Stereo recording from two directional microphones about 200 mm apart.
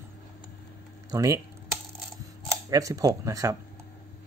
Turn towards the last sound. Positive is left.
turn(degrees=-15)  # may be behind; listen again after turning